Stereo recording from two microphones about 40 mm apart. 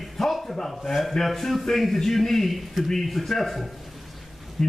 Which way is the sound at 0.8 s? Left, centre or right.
Centre.